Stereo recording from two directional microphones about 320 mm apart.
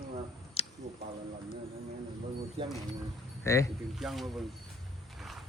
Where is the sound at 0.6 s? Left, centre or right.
Centre.